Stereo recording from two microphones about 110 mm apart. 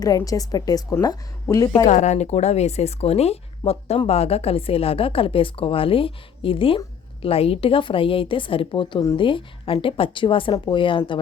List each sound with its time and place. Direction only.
0.0 s a woman's voice: 35° left (ahead or behind)
1.9 s a woman's voice: 90° left; by 11.2 s 50° left (ahead or behind)